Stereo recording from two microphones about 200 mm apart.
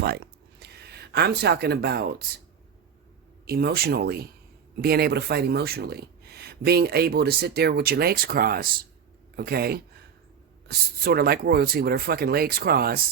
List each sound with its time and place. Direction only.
0.6 s speech: 55° right (ahead or behind)
3.4 s speech: 50° right (ahead or behind)